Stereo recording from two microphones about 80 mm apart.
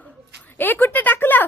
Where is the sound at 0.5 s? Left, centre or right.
Left.